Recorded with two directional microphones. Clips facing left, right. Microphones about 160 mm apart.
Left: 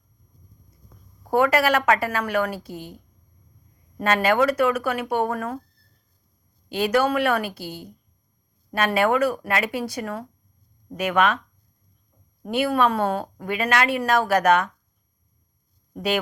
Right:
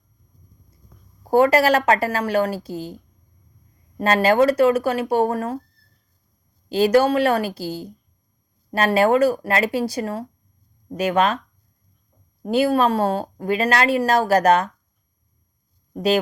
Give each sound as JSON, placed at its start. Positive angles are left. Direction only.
{"t": 1.3, "sound": "speech", "side_deg": -35}
{"t": 3.9, "sound": "speech", "side_deg": -35}
{"t": 6.7, "sound": "speech", "side_deg": -35}
{"t": 7.6, "sound": "a woman's voice", "side_deg": -90}
{"t": 8.7, "sound": "speech", "side_deg": -35}
{"t": 12.4, "sound": "speech", "side_deg": -35}
{"t": 16.0, "sound": "speech", "side_deg": -35}